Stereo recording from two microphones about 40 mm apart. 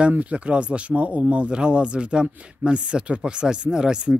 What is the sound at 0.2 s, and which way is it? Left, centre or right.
Speech, right.